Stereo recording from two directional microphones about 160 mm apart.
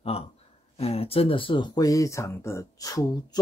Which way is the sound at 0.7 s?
40° left (ahead or behind).